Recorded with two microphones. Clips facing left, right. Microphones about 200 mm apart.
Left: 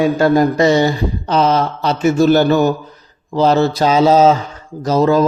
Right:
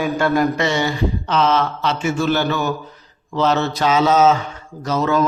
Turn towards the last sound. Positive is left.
turn(degrees=35)  # may be behind; listen again after turning